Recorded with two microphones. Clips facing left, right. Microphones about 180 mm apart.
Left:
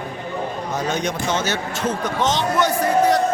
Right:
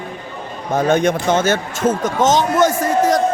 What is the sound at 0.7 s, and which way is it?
Speech, 55° right (ahead or behind).